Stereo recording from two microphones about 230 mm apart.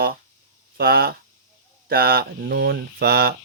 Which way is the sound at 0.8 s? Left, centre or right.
Right.